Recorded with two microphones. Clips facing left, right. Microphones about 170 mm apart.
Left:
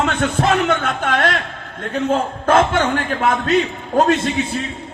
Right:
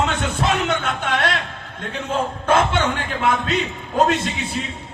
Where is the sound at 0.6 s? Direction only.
55° left (ahead or behind).